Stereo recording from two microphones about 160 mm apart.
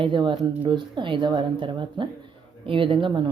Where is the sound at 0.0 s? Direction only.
30° right (ahead or behind).